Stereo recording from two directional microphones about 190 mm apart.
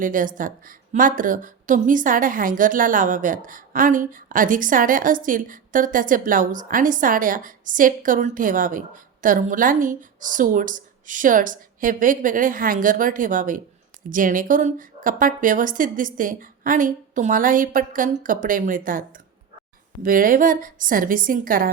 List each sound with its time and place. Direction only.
0.0 s a woman's voice: 45° right (ahead or behind)